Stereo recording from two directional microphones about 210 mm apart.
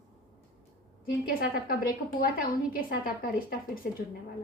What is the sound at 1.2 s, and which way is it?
A woman's voice, 45° left (ahead or behind).